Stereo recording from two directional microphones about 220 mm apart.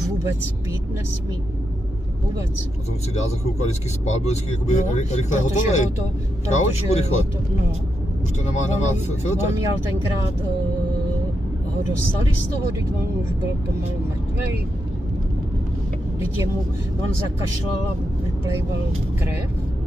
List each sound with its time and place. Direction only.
3.2 s speech: 30° left (ahead or behind)
8.6 s speech: 30° left (ahead or behind)